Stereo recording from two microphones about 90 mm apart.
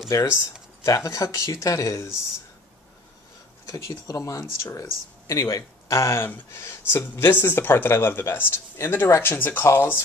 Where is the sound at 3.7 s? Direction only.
35° left (ahead or behind).